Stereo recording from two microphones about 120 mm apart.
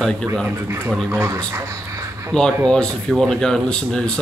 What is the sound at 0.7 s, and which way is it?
Speech, 20° right (ahead or behind).